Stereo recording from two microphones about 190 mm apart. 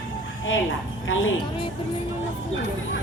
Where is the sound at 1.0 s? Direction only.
90° left.